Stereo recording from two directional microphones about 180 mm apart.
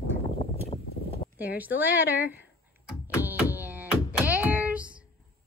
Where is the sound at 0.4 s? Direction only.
40° left (ahead or behind).